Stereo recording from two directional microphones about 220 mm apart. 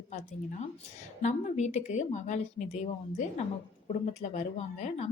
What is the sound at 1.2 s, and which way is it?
Speech, 30° left (ahead or behind).